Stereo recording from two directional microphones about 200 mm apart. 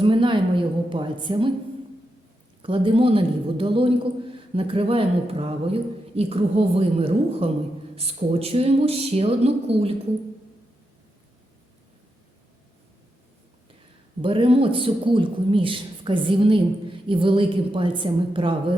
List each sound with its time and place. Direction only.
0.0 s a man's voice: 25° right (ahead or behind)
2.6 s a man's voice: 25° right (ahead or behind)
14.2 s a man's voice: 25° right (ahead or behind)